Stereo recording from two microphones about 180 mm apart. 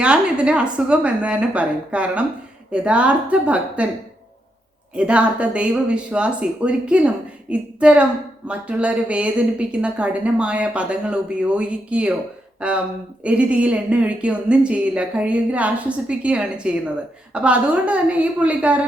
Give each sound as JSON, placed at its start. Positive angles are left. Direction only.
{"t": 0.0, "sound": "a woman's voice", "side_deg": -5}
{"t": 4.9, "sound": "a woman's voice", "side_deg": -5}